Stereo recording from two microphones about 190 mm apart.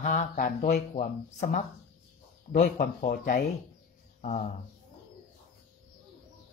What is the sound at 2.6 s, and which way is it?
Speech, 45° left (ahead or behind).